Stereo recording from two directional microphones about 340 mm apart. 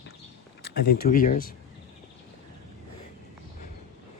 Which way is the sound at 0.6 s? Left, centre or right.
Left.